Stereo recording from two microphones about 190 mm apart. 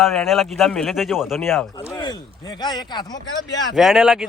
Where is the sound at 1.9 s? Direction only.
20° left (ahead or behind).